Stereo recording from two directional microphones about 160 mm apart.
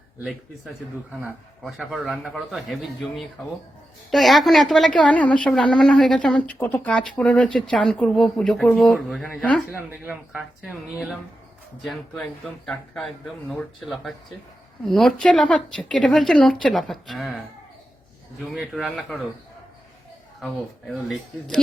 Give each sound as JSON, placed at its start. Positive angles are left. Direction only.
{"t": 1.2, "sound": "a woman's voice", "side_deg": -5}
{"t": 10.1, "sound": "a woman's voice", "side_deg": -5}
{"t": 18.4, "sound": "a woman's voice", "side_deg": 0}
{"t": 20.4, "sound": "a woman's voice", "side_deg": 0}